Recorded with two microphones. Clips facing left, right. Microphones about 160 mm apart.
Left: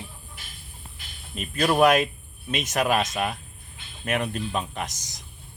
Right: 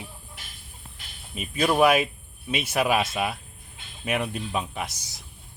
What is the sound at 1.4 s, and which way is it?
Speech, 10° right (ahead or behind).